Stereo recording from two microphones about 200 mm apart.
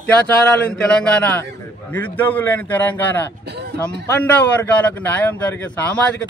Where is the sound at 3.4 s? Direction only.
55° right (ahead or behind).